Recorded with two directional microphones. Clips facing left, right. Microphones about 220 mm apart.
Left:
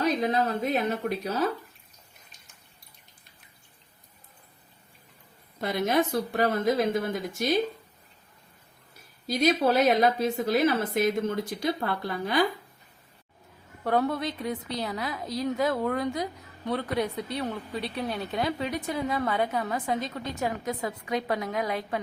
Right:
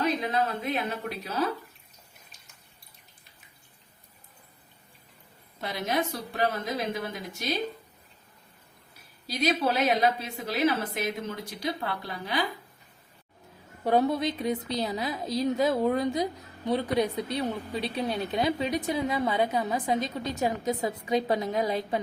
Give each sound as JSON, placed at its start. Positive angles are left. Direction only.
{"t": 0.0, "sound": "a woman's voice", "side_deg": 45}
{"t": 5.5, "sound": "a woman's voice", "side_deg": 50}
{"t": 9.2, "sound": "a woman's voice", "side_deg": 50}
{"t": 13.8, "sound": "a woman's voice", "side_deg": -20}